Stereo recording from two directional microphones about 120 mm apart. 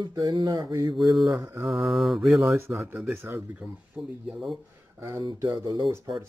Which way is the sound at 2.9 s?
20° right (ahead or behind).